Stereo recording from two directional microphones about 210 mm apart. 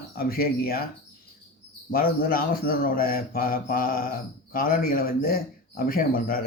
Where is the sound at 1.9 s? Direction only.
40° left (ahead or behind).